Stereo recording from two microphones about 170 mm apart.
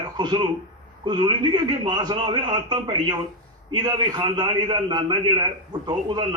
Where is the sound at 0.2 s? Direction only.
25° right (ahead or behind).